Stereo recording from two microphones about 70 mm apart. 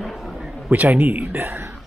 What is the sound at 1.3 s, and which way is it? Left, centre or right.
Speech, right.